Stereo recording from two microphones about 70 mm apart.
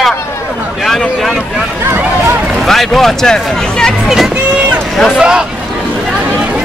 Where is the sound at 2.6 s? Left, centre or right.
Centre.